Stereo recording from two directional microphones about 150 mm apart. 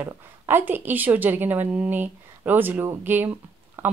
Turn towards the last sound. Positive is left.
turn(degrees=-15)  # may be behind; listen again after turning